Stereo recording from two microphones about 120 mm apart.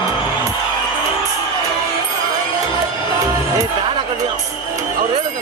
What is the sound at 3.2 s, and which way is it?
Music, 30° right (ahead or behind).